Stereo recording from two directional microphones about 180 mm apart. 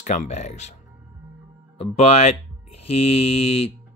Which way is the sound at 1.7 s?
35° left (ahead or behind).